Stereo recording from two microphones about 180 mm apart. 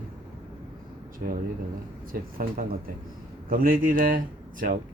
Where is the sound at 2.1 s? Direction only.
55° right (ahead or behind).